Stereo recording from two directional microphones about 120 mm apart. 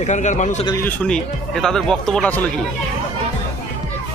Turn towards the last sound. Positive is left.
turn(degrees=5)  # may be behind; listen again after turning